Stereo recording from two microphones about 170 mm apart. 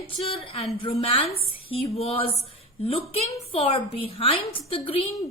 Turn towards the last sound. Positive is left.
turn(degrees=35)  # may be behind; listen again after turning